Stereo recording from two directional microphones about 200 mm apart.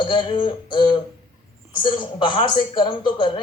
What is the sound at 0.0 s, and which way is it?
Speech, 25° left (ahead or behind).